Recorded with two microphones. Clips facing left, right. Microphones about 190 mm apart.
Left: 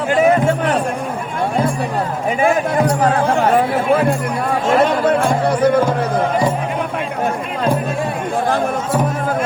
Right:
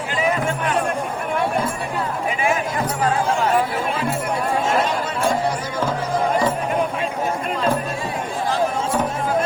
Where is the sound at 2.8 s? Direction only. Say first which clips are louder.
Left 3 dB; 60° left (ahead or behind).